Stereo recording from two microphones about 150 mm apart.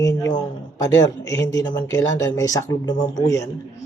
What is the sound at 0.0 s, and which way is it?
A man's voice, 25° left (ahead or behind).